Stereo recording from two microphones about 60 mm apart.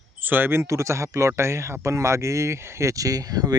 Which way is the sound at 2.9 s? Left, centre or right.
Right.